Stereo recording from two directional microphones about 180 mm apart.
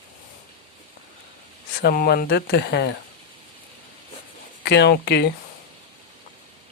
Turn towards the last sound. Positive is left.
turn(degrees=65)  # may be behind; listen again after turning